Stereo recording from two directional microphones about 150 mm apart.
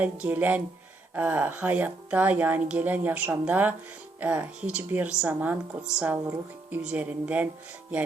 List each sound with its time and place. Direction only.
0.0 s a woman's voice: 10° right (ahead or behind)